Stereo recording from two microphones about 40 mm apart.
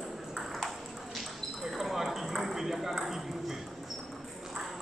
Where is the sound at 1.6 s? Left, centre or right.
Centre.